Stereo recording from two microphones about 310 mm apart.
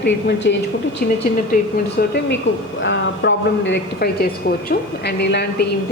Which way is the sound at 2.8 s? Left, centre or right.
Left.